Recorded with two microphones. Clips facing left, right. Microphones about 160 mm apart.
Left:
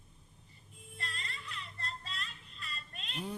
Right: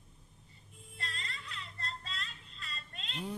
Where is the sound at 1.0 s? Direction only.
25° right (ahead or behind).